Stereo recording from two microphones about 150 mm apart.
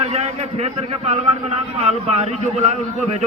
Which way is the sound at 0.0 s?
45° right (ahead or behind).